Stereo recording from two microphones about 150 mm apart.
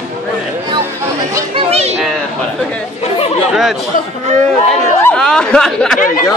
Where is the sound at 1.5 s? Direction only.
45° right (ahead or behind).